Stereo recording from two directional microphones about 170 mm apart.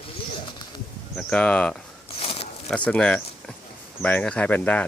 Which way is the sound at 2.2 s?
35° left (ahead or behind).